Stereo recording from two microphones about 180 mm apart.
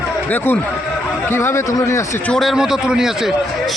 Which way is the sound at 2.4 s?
Centre (ahead or behind).